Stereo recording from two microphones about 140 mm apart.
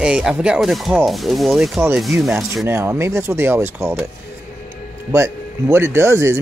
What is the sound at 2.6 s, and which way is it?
Speech, 20° right (ahead or behind).